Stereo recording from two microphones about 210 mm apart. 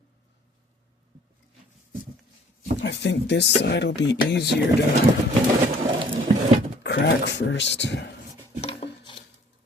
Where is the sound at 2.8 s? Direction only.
55° left (ahead or behind).